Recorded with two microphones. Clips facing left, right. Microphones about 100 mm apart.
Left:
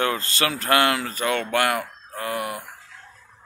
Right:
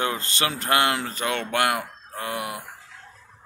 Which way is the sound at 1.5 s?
20° right (ahead or behind).